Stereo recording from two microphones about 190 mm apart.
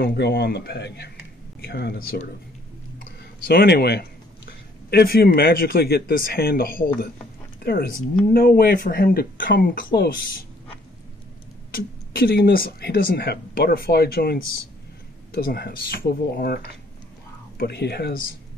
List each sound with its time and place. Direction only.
0.0 s speech: 55° left (ahead or behind)
3.0 s a sound: 55° left (ahead or behind)
4.5 s speech: 55° left (ahead or behind)
11.7 s speech: 55° left (ahead or behind)